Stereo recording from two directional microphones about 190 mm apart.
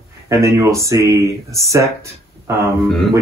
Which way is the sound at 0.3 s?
15° right (ahead or behind).